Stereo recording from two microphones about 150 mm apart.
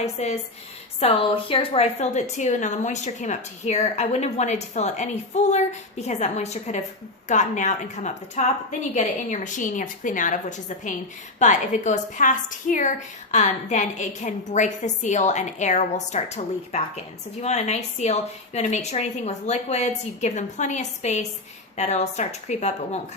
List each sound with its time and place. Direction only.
0.0 s a woman's voice: 45° left (ahead or behind)
11.3 s a woman's voice: 55° left (ahead or behind)